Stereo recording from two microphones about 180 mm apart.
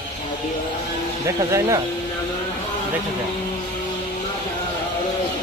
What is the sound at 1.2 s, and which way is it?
Speech, 15° right (ahead or behind).